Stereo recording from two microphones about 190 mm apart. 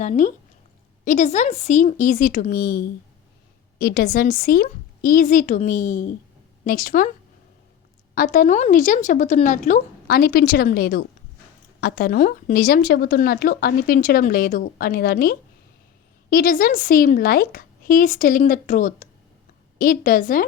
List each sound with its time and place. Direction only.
0.0 s speech: 40° left (ahead or behind)
8.1 s speech: 50° left (ahead or behind)